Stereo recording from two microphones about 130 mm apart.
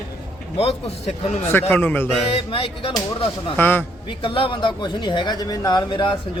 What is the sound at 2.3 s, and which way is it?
Speech, 45° left (ahead or behind).